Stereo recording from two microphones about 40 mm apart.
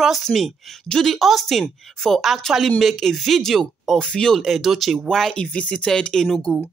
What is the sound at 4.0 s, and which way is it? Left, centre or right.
Speech, centre.